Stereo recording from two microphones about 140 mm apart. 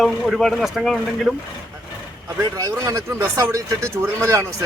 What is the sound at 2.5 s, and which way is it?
Speech, 25° right (ahead or behind).